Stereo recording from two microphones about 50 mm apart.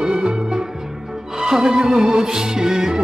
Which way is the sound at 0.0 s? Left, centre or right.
Centre.